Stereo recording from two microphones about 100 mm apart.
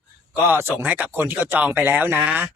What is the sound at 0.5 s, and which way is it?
Speech, 20° right (ahead or behind).